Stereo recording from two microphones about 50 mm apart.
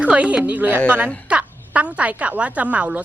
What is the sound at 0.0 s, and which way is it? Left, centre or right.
A woman's voice, right.